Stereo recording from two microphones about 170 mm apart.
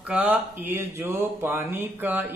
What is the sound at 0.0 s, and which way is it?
Speech, 5° right (ahead or behind).